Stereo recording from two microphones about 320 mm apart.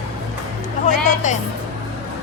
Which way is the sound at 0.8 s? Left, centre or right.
Left.